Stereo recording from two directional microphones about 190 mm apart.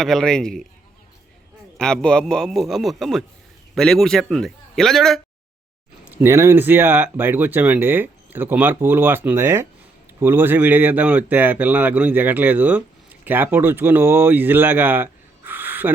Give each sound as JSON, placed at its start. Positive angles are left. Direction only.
{"t": 0.0, "sound": "a man's voice", "side_deg": 0}
{"t": 1.8, "sound": "a man's voice", "side_deg": 5}
{"t": 6.1, "sound": "speech", "side_deg": -15}